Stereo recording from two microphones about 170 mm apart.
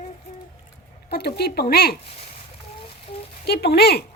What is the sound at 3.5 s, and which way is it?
Speech, 70° left (ahead or behind).